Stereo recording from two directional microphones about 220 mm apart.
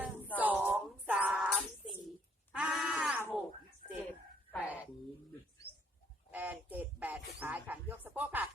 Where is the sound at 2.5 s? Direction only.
Centre (ahead or behind).